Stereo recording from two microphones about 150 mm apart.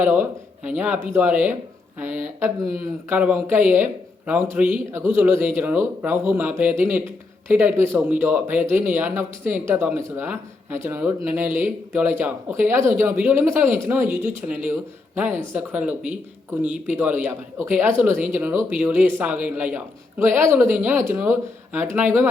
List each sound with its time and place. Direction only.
0.0 s a man's voice: 15° right (ahead or behind)